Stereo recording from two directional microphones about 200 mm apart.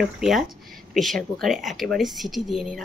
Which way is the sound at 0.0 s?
Centre (ahead or behind).